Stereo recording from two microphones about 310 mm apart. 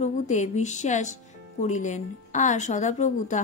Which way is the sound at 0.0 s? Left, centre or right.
Left.